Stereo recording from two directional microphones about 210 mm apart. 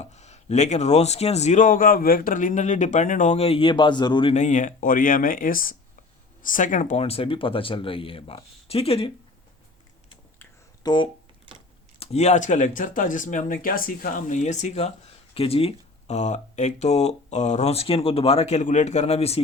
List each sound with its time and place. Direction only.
0.0 s a man's voice: 30° left (ahead or behind)
10.3 s a sound: 10° left (ahead or behind)
11.9 s a man's voice: 30° left (ahead or behind)